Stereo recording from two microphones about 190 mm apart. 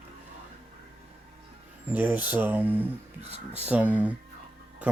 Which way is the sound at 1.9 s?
10° right (ahead or behind).